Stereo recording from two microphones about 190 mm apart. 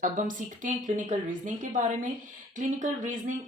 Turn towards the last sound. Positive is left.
turn(degrees=-40)  # may be behind; listen again after turning